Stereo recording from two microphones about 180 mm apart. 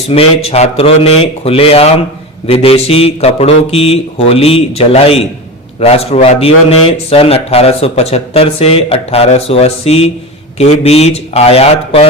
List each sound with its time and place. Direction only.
0.1 s speech: 35° left (ahead or behind)